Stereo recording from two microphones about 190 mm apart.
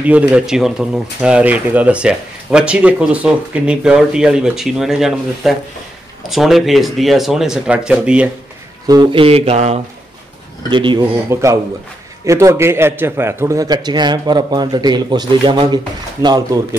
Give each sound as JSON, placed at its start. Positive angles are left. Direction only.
{"t": 0.3, "sound": "speech", "side_deg": 0}
{"t": 8.8, "sound": "a man's voice", "side_deg": -20}